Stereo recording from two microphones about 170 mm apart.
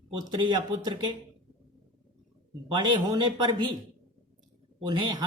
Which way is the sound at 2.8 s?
25° right (ahead or behind).